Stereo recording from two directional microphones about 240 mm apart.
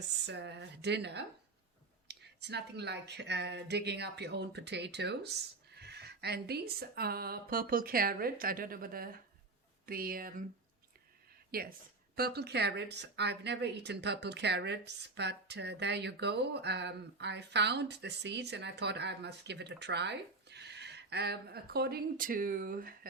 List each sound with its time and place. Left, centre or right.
0.3 s speech: right
11.5 s speech: right